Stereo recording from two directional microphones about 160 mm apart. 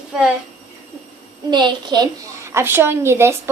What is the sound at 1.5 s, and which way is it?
A woman's voice, 30° right (ahead or behind).